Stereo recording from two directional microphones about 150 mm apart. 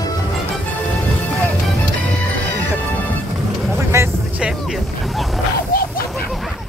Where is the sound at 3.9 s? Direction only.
20° right (ahead or behind).